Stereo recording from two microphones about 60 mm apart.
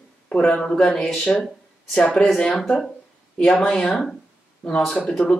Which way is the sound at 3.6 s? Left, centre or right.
Centre.